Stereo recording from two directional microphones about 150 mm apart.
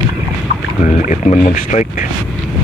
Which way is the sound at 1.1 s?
50° left (ahead or behind).